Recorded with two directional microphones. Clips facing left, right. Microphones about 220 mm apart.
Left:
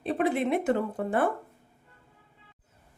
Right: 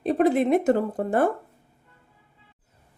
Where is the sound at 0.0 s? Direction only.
40° right (ahead or behind).